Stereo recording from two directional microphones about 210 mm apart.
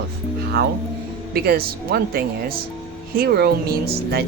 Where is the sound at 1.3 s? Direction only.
45° right (ahead or behind).